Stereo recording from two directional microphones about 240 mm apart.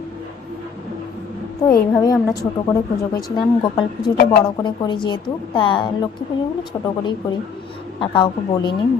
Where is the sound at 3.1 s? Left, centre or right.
Centre.